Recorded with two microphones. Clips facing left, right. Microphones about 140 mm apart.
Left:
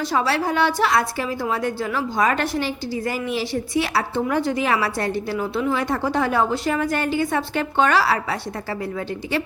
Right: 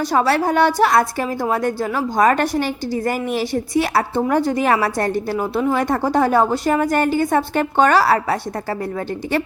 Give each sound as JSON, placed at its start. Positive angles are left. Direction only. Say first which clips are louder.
{"t": 0.0, "sound": "a woman's voice", "louder": "right 4 dB", "side_deg": -45}